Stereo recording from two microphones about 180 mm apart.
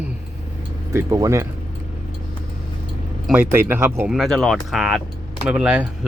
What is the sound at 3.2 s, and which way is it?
Speech, 10° right (ahead or behind).